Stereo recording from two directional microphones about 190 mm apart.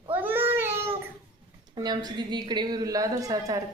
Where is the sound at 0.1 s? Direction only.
10° right (ahead or behind).